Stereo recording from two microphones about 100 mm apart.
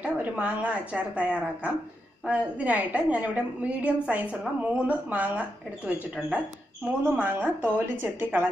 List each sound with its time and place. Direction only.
0.0 s a woman's voice: 15° right (ahead or behind)